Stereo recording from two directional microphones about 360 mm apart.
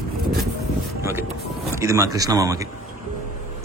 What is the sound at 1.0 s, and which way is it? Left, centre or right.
A man's voice, centre.